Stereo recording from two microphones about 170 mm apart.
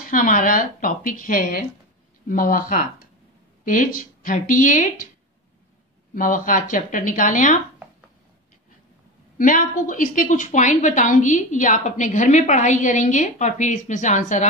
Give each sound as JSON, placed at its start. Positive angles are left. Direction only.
{"t": 0.0, "sound": "a woman's voice", "side_deg": 55}
{"t": 6.1, "sound": "a woman's voice", "side_deg": 55}
{"t": 9.4, "sound": "a woman's voice", "side_deg": 50}